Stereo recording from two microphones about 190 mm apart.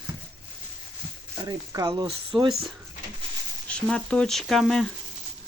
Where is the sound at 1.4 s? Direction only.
20° right (ahead or behind).